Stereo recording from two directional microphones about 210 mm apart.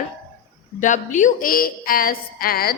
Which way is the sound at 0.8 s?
35° left (ahead or behind).